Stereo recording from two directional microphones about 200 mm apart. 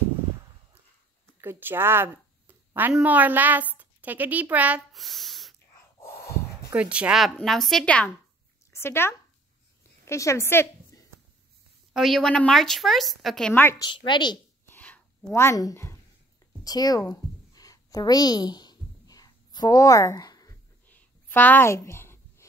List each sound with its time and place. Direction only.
1.4 s a woman's voice: 10° right (ahead or behind)
6.0 s snort: 15° left (ahead or behind)
6.7 s a woman's voice: 5° right (ahead or behind); by 11.1 s 10° left (ahead or behind)
11.9 s a woman's voice: centre (ahead or behind)
13.8 s a woman's voice: 25° left (ahead or behind)
14.7 s a sound: 10° left (ahead or behind)